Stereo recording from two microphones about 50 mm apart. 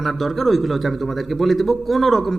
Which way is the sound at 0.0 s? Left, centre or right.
Centre.